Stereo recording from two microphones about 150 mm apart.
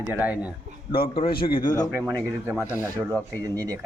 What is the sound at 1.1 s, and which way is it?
Speech, 35° left (ahead or behind).